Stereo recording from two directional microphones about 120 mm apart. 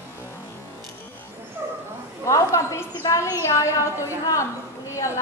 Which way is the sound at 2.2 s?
25° left (ahead or behind).